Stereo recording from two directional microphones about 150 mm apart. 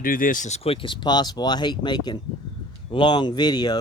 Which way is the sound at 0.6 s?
40° left (ahead or behind).